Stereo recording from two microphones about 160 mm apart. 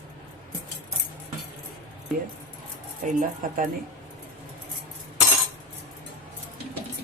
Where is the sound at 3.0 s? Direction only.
55° right (ahead or behind).